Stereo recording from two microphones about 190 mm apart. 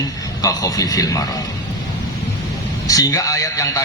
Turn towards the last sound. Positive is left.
turn(degrees=20)  # may be behind; listen again after turning